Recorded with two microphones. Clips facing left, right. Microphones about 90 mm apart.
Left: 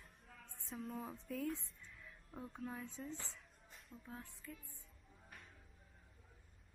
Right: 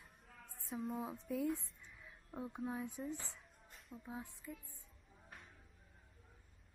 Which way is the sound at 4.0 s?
15° right (ahead or behind).